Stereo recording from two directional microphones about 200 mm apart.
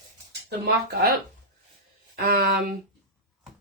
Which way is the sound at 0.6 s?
55° right (ahead or behind).